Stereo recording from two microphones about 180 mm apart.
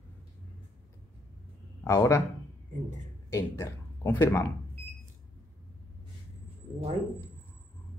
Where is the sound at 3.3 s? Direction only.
15° left (ahead or behind).